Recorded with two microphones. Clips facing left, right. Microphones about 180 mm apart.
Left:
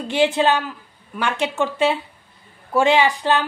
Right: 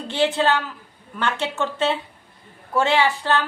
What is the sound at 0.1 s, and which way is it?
A woman's voice, 15° left (ahead or behind).